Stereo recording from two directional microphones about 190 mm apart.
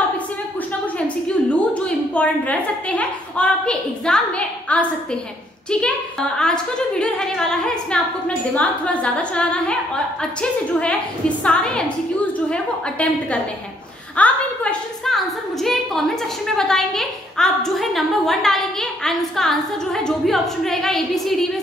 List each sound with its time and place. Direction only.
0.9 s a woman's voice: 5° left (ahead or behind)